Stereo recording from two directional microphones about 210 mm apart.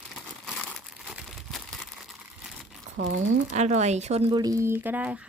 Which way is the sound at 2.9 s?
65° right (ahead or behind).